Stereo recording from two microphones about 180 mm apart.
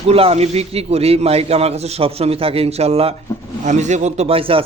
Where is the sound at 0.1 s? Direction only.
35° right (ahead or behind).